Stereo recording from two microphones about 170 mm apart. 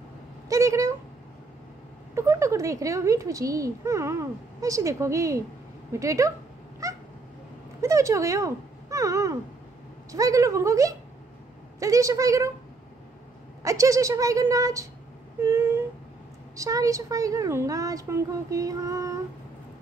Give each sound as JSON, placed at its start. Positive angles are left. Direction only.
{"t": 0.5, "sound": "a sound", "side_deg": -15}
{"t": 2.1, "sound": "speech", "side_deg": -15}
{"t": 6.8, "sound": "cat", "side_deg": -20}
{"t": 7.8, "sound": "speech", "side_deg": -15}
{"t": 13.6, "sound": "speech", "side_deg": -20}
{"t": 15.4, "sound": "a sound", "side_deg": -15}
{"t": 16.5, "sound": "speech", "side_deg": -20}